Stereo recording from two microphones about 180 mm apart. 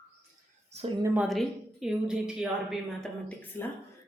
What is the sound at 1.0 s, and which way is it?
A woman's voice, 5° right (ahead or behind).